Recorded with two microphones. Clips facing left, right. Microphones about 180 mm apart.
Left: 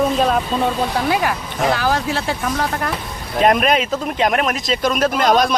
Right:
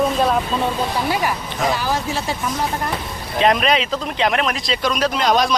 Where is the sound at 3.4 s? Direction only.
50° left (ahead or behind).